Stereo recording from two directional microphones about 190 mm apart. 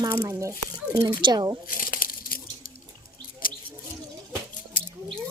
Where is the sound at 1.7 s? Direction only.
50° left (ahead or behind).